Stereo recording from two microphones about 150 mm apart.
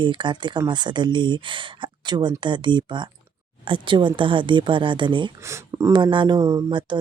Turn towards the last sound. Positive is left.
turn(degrees=-30)  # may be behind; listen again after turning